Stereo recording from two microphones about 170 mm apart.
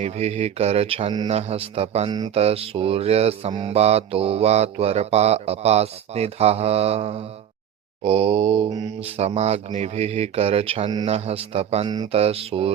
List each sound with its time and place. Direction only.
0.0 s mantra: 40° right (ahead or behind)
8.7 s mantra: 25° right (ahead or behind)
9.0 s mantra: 35° right (ahead or behind)